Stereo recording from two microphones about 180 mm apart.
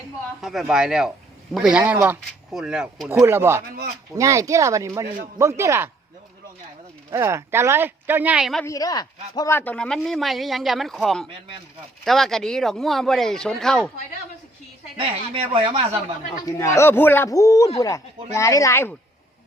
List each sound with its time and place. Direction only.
0.4 s speech: 5° right (ahead or behind)
7.1 s speech: 15° right (ahead or behind)
8.6 s speech: 20° left (ahead or behind); by 13.9 s 5° left (ahead or behind)
14.9 s speech: 30° right (ahead or behind)
16.5 s a man's voice: 15° left (ahead or behind)